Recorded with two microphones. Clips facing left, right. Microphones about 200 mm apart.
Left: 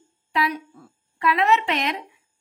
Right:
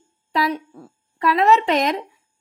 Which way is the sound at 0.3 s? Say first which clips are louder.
Right 3 dB; 35° right (ahead or behind).